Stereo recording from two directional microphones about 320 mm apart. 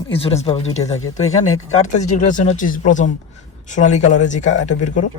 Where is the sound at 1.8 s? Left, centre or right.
Left.